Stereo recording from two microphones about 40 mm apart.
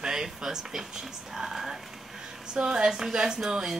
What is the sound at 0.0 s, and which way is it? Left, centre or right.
Speech, centre.